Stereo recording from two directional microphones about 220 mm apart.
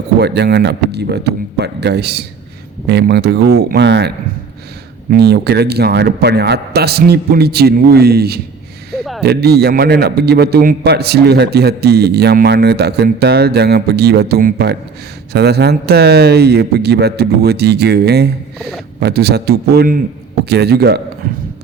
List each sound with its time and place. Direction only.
0.2 s a man's voice: 50° right (ahead or behind)
5.1 s a man's voice: 45° right (ahead or behind)
21.2 s a sound: 40° right (ahead or behind)